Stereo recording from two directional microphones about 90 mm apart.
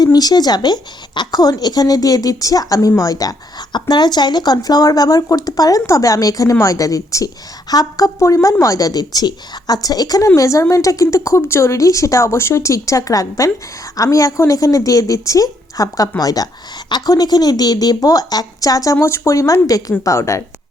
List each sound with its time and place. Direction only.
0.0 s a woman's voice: 45° left (ahead or behind)